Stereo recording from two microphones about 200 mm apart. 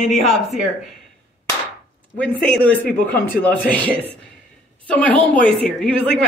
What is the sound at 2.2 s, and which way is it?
A woman's voice, 5° left (ahead or behind).